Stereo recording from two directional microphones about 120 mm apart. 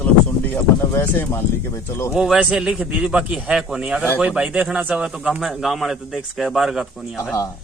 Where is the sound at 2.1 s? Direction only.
5° right (ahead or behind).